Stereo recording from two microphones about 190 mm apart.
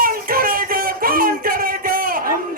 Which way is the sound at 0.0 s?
50° right (ahead or behind).